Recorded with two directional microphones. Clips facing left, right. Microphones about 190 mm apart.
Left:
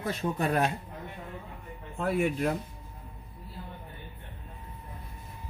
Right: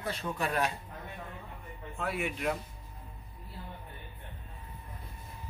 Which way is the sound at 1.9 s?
50° left (ahead or behind).